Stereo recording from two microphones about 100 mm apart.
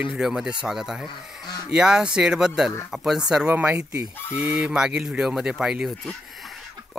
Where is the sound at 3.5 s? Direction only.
15° right (ahead or behind).